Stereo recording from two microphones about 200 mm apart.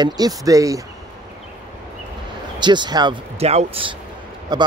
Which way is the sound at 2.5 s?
20° right (ahead or behind).